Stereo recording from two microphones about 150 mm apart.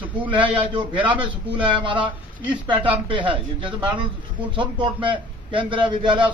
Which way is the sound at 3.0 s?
35° right (ahead or behind).